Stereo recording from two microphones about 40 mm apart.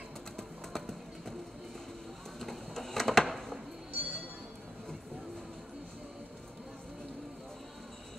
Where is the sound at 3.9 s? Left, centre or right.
Right.